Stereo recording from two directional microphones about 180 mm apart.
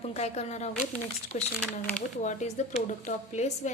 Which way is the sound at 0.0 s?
35° left (ahead or behind).